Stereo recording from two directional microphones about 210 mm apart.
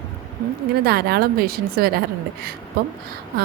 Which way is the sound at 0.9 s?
50° right (ahead or behind).